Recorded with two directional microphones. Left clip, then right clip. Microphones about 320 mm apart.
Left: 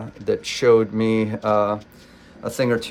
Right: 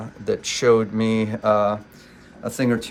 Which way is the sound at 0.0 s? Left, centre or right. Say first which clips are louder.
Left 1 dB; centre.